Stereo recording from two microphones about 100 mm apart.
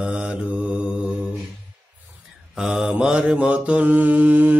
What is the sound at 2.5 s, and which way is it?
Mantra, 5° right (ahead or behind).